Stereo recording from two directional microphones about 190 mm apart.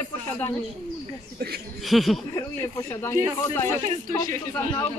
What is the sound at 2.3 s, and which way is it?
Speech, 15° left (ahead or behind).